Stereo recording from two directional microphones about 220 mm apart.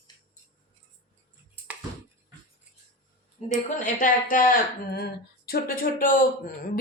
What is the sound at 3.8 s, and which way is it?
Speech, 35° left (ahead or behind).